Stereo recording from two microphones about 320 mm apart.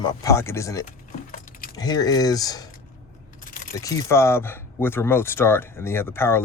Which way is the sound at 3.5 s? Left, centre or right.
Left.